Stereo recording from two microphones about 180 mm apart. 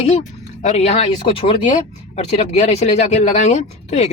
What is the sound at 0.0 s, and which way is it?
Speech, 45° left (ahead or behind).